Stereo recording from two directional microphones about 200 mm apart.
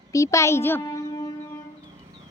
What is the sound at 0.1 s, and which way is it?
Speech, 15° left (ahead or behind).